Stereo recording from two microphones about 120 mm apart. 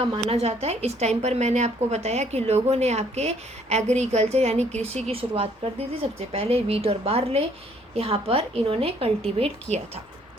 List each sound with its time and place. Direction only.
0.3 s a woman's voice: 60° right (ahead or behind)